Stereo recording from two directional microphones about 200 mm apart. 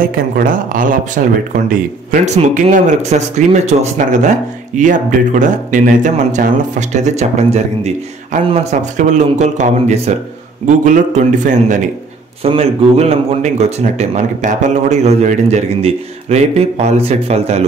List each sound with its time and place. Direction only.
0.4 s speech: 45° right (ahead or behind)
11.4 s speech: 40° right (ahead or behind)